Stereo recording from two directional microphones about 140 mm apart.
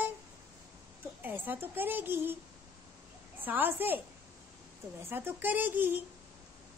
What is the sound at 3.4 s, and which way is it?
A woman's voice, 15° right (ahead or behind).